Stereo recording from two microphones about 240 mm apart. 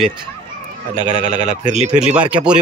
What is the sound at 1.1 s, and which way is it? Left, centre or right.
Speech, right.